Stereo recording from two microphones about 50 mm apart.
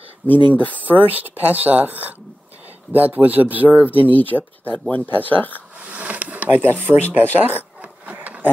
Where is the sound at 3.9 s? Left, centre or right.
Left.